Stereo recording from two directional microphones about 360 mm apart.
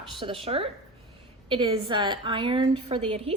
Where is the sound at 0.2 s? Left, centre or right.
Centre.